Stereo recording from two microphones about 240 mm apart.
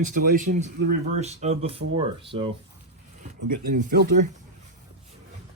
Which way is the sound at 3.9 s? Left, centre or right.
Right.